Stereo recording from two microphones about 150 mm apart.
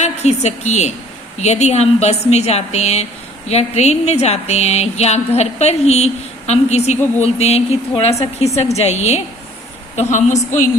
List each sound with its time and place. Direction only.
0.0 s a woman's voice: 45° left (ahead or behind)